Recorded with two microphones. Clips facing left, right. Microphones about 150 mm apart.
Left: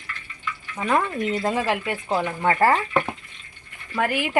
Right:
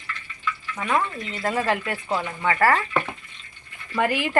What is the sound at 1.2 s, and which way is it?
Speech, 50° left (ahead or behind).